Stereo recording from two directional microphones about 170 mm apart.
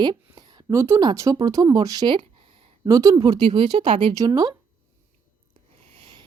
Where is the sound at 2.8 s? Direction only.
20° right (ahead or behind).